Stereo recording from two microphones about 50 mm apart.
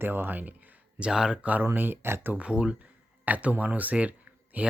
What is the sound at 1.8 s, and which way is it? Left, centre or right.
Speech, right.